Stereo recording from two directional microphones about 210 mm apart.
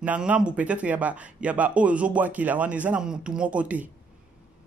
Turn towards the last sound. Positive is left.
turn(degrees=-5)  # may be behind; listen again after turning